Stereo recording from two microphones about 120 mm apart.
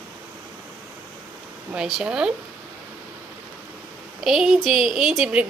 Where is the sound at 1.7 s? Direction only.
5° right (ahead or behind).